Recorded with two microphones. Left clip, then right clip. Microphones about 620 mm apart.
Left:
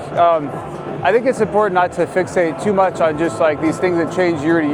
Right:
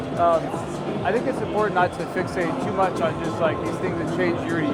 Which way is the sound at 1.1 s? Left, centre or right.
Left.